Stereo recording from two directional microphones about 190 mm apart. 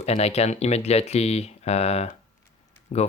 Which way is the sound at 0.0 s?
35° left (ahead or behind).